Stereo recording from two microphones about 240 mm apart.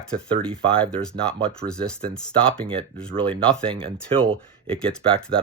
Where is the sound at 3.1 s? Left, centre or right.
Right.